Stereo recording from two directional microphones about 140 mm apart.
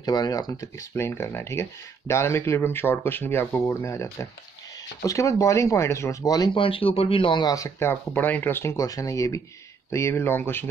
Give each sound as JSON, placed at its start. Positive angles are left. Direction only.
{"t": 0.0, "sound": "speech", "side_deg": 30}